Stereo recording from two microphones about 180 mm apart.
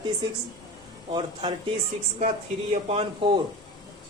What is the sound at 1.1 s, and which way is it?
Speech, 25° right (ahead or behind).